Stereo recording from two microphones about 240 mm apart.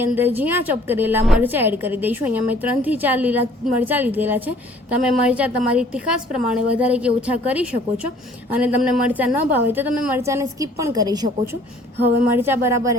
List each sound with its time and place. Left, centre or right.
0.0 s a woman's voice: centre
12.4 s a woman's voice: centre